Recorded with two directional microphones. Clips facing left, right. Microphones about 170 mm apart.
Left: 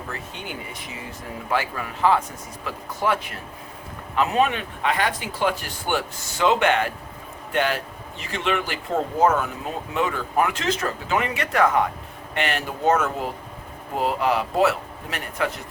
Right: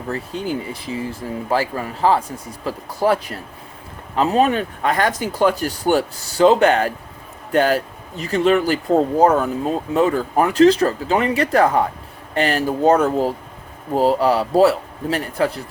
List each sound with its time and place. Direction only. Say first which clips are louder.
0.1 s speech: right 14 dB; 35° right (ahead or behind)